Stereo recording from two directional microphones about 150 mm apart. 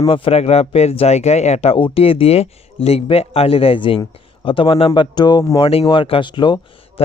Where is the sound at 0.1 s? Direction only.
40° left (ahead or behind).